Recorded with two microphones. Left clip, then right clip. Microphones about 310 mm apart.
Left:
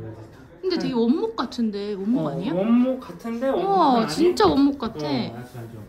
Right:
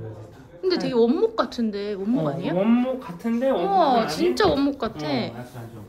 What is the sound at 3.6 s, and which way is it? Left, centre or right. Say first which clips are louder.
A woman's voice: left 1 dB; centre.